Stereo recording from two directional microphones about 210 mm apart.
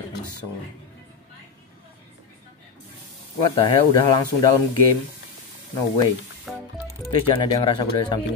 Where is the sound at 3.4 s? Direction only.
25° left (ahead or behind).